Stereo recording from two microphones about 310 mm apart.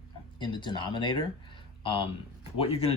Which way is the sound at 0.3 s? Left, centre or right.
Centre.